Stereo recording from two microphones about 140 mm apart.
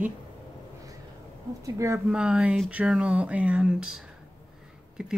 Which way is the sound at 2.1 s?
5° right (ahead or behind).